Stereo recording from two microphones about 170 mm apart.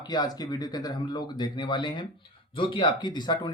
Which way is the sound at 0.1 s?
25° left (ahead or behind).